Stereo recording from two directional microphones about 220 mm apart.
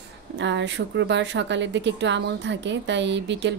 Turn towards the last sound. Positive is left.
turn(degrees=-55)  # may be behind; listen again after turning